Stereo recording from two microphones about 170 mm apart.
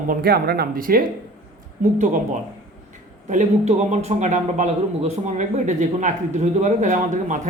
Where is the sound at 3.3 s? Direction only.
45° right (ahead or behind).